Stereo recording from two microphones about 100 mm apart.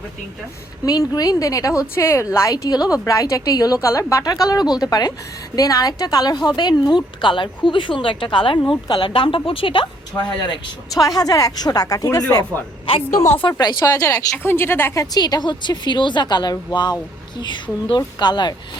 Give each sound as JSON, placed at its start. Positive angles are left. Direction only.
{"t": 0.9, "sound": "speech", "side_deg": 40}
{"t": 2.6, "sound": "a woman's voice", "side_deg": 40}
{"t": 11.0, "sound": "speech", "side_deg": 35}
{"t": 13.6, "sound": "speech", "side_deg": 40}
{"t": 14.5, "sound": "speech", "side_deg": 25}
{"t": 15.1, "sound": "a woman's voice", "side_deg": 40}